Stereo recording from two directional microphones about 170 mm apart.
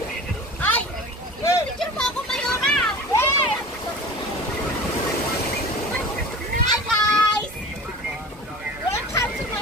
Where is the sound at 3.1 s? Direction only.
15° left (ahead or behind).